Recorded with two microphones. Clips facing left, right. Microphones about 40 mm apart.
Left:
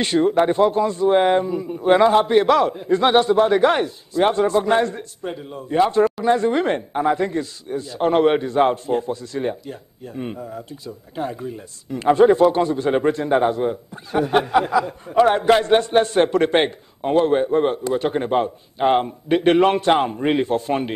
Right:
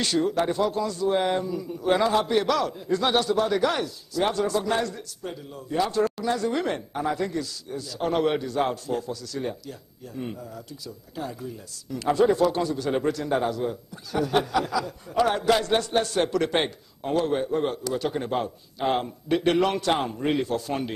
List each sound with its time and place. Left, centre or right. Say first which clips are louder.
0.0 s speech: left 7 dB; left